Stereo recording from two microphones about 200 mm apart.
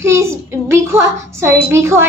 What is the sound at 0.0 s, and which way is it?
Child singing, 15° right (ahead or behind).